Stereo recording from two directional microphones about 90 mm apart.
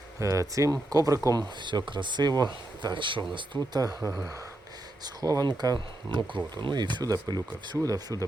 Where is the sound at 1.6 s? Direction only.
60° right (ahead or behind).